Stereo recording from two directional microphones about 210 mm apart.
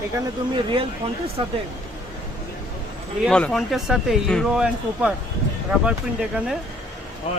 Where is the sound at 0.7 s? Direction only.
25° right (ahead or behind).